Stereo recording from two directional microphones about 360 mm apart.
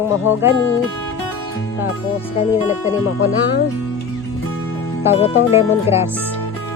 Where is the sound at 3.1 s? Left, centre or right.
Left.